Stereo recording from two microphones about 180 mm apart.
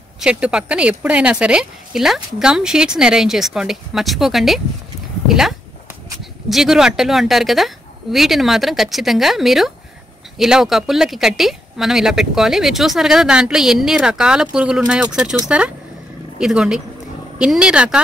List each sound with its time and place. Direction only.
0.2 s a woman's voice: 5° right (ahead or behind)